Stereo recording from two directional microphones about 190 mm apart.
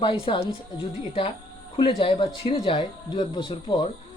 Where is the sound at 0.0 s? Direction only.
25° left (ahead or behind).